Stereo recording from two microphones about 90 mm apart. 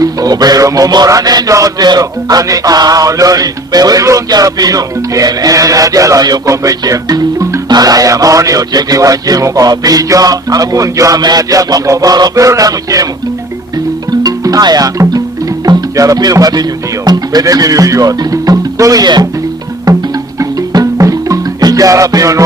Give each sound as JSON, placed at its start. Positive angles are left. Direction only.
{"t": 0.0, "sound": "music", "side_deg": -45}
{"t": 14.1, "sound": "music", "side_deg": -45}
{"t": 15.6, "sound": "speech", "side_deg": -40}
{"t": 17.1, "sound": "music", "side_deg": -45}